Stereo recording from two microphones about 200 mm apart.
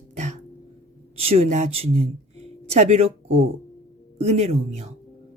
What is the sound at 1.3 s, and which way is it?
Speech, 30° right (ahead or behind).